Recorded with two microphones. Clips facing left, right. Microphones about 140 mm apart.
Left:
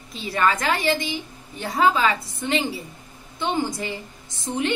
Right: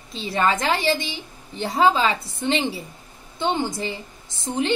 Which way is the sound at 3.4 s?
30° right (ahead or behind).